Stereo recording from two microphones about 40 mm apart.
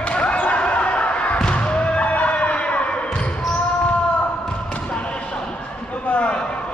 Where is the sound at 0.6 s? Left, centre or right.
Left.